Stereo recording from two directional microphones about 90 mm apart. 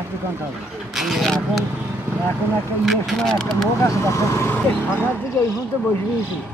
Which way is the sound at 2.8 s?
Centre (ahead or behind).